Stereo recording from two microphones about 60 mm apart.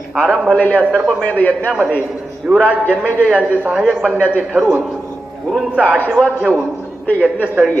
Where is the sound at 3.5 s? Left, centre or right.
Right.